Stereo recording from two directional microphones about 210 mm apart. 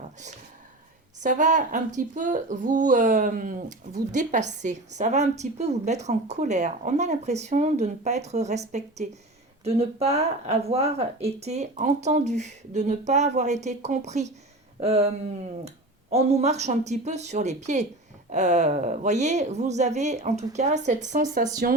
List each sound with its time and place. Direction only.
1.2 s speech: 35° right (ahead or behind)